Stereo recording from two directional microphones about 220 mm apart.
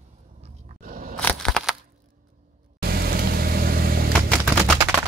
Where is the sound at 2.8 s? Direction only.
45° right (ahead or behind).